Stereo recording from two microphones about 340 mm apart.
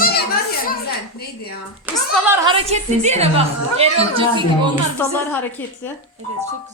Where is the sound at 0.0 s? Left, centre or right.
Left.